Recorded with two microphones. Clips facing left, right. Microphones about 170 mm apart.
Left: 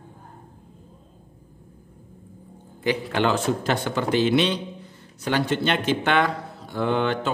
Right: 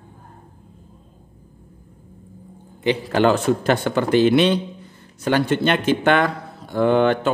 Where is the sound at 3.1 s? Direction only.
50° right (ahead or behind).